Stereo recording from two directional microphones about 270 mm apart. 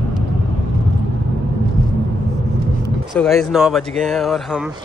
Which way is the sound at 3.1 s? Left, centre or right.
Centre.